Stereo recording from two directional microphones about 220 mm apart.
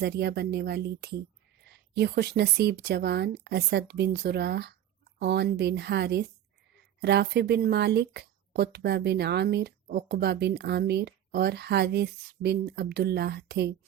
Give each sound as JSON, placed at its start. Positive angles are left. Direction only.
{"t": 0.0, "sound": "speech", "side_deg": -50}